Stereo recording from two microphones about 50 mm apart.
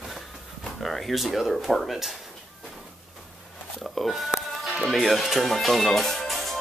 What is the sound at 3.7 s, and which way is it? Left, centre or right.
Speech, centre.